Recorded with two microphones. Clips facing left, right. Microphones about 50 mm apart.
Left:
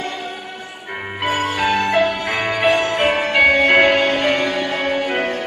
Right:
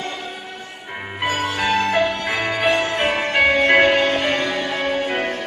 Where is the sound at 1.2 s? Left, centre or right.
Centre.